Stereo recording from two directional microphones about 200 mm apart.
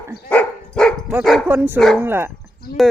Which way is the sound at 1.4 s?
10° right (ahead or behind).